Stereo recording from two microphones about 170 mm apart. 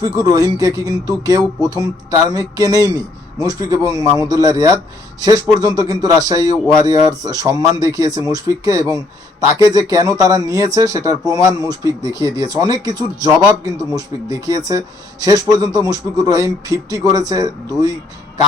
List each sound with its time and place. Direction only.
0.0 s speech: 20° right (ahead or behind)